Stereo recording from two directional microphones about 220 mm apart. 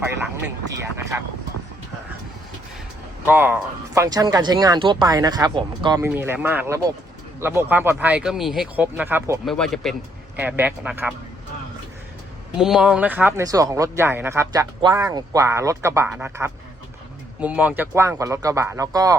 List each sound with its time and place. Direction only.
1.1 s speech: 15° right (ahead or behind)
3.2 s speech: 10° right (ahead or behind)
6.2 s speech: 10° right (ahead or behind)
9.5 s speech: centre (ahead or behind)
12.5 s speech: centre (ahead or behind)